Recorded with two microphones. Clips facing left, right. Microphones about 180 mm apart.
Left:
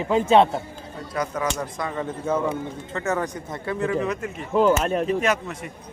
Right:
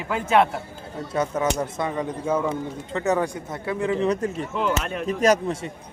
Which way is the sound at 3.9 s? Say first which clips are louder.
Right 3 dB; 30° right (ahead or behind).